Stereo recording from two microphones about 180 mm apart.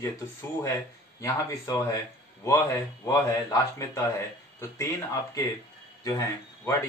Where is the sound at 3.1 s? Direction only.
20° left (ahead or behind).